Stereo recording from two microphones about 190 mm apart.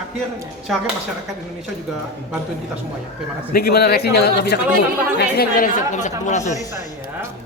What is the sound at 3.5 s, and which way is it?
Speech, 55° left (ahead or behind).